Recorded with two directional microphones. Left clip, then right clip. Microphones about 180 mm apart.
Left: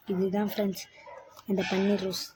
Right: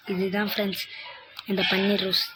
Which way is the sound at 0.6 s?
10° left (ahead or behind).